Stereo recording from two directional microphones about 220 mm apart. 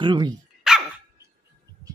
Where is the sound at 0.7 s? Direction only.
5° right (ahead or behind).